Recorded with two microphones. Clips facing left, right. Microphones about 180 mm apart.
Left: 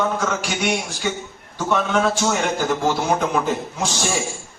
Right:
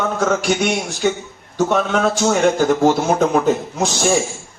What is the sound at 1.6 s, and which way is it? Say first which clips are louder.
A man's voice: right 3 dB; 45° right (ahead or behind).